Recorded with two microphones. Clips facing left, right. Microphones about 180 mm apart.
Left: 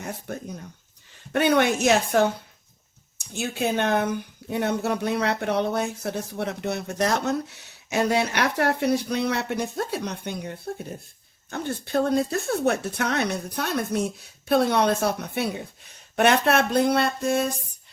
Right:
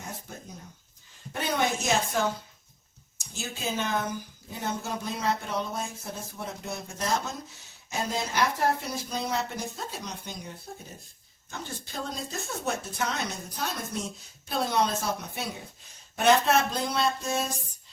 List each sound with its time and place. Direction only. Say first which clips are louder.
0.0 s a woman's voice: left 8 dB; 65° left (ahead or behind)